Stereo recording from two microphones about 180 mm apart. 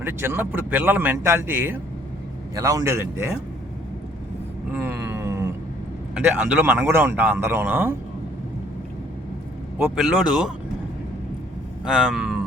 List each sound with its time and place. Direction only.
0.0 s a man's voice: 10° right (ahead or behind)
4.7 s a sound: 10° right (ahead or behind)
6.1 s a man's voice: 5° right (ahead or behind)
9.7 s speech: 5° right (ahead or behind)
11.9 s speech: 5° right (ahead or behind)